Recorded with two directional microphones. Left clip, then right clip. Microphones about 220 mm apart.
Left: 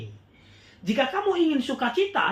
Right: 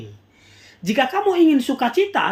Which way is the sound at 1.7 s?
40° right (ahead or behind).